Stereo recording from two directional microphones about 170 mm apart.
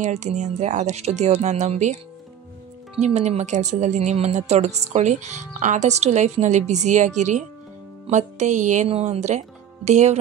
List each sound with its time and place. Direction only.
0.0 s a woman's voice: 45° right (ahead or behind)
3.0 s a woman's voice: 40° right (ahead or behind)